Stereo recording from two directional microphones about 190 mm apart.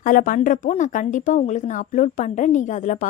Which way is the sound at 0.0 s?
45° left (ahead or behind).